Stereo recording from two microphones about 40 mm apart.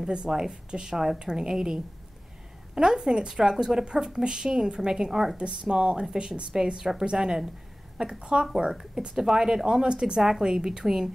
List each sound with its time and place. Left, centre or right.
0.1 s speech: centre
2.7 s a woman's voice: centre
5.4 s speech: right